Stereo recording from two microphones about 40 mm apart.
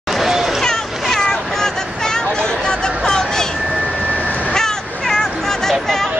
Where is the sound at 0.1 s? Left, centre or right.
Centre.